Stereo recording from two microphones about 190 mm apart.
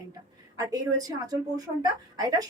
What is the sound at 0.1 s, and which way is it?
A woman's voice, 20° right (ahead or behind).